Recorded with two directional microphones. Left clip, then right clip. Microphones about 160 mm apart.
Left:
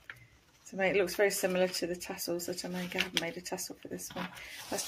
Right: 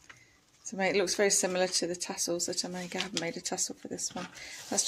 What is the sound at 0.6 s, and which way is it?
Speech, 45° right (ahead or behind).